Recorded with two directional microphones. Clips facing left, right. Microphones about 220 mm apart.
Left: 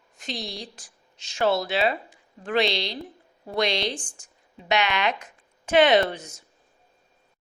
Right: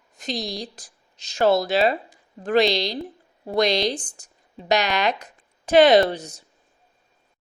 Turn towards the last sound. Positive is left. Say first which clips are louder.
# right 4 dB
turn(degrees=-35)  # may be behind; listen again after turning